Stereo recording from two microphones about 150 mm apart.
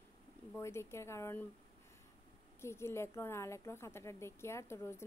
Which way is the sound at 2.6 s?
15° left (ahead or behind).